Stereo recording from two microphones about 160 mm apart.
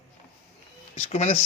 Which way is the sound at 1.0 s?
45° left (ahead or behind).